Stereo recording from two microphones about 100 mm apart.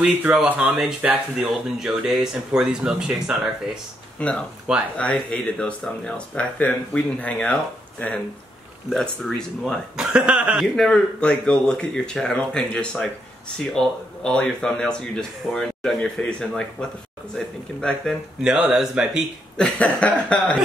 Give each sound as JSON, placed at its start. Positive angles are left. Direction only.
{"t": 0.0, "sound": "speech", "side_deg": -10}
{"t": 4.2, "sound": "a man's voice", "side_deg": 10}
{"t": 8.9, "sound": "a man's voice", "side_deg": 5}
{"t": 9.9, "sound": "speech", "side_deg": -10}
{"t": 10.8, "sound": "a man's voice", "side_deg": 5}
{"t": 18.4, "sound": "speech", "side_deg": -5}
{"t": 19.5, "sound": "a man's voice", "side_deg": 10}